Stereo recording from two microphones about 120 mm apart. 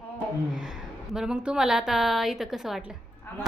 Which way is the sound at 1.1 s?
5° right (ahead or behind).